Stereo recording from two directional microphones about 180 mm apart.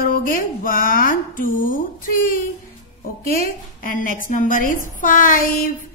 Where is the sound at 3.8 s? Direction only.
50° left (ahead or behind).